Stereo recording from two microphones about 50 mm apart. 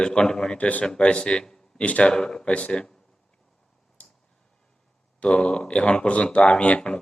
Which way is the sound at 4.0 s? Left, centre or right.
Left.